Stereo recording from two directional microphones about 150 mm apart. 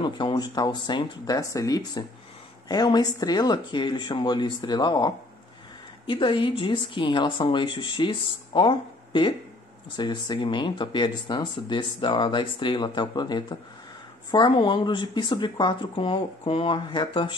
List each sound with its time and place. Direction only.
0.0 s speech: 30° left (ahead or behind)